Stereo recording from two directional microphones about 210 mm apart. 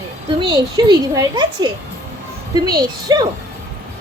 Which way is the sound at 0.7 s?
20° right (ahead or behind).